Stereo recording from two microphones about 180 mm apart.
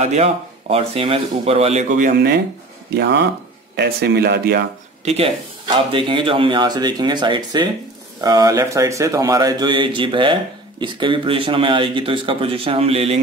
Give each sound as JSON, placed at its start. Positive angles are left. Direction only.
{"t": 0.0, "sound": "speech", "side_deg": -35}
{"t": 5.0, "sound": "speech", "side_deg": -35}